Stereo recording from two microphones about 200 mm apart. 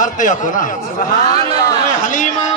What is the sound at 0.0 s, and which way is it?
Speech, 40° left (ahead or behind).